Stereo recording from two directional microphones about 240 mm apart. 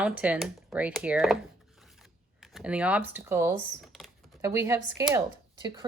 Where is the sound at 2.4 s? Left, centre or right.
Centre.